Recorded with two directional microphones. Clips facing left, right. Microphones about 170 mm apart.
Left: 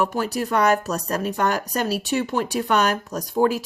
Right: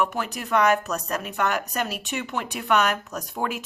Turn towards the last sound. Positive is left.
turn(degrees=35)  # may be behind; listen again after turning